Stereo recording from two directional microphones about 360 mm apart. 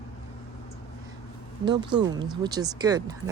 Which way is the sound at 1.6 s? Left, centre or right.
Centre.